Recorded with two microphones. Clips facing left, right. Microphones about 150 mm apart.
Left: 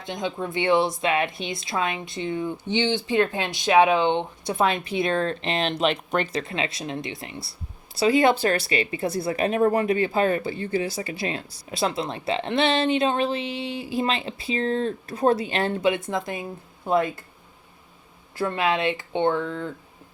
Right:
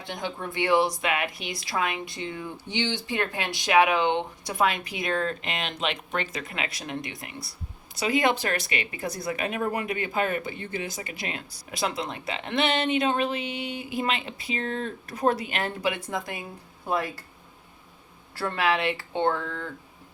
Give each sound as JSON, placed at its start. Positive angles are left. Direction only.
{"t": 0.0, "sound": "speech", "side_deg": 20}
{"t": 18.3, "sound": "speech", "side_deg": 20}